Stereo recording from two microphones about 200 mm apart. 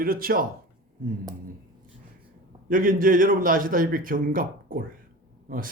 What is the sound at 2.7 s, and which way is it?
Speech, 45° right (ahead or behind).